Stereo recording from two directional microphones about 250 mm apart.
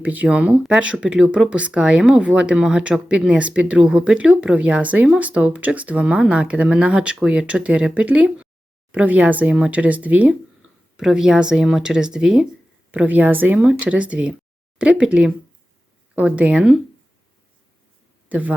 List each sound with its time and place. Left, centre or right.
0.0 s speech: centre
18.3 s speech: centre